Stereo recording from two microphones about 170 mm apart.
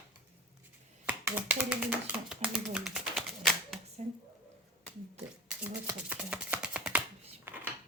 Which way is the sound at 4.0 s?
40° right (ahead or behind).